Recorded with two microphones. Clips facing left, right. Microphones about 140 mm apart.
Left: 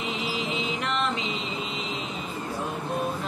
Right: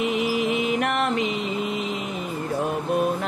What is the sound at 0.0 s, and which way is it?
Mantra, 60° right (ahead or behind).